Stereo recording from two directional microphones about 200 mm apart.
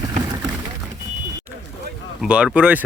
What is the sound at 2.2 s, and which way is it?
Speech, 5° right (ahead or behind).